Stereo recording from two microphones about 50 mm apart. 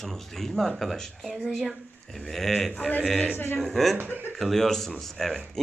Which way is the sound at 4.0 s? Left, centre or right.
Right.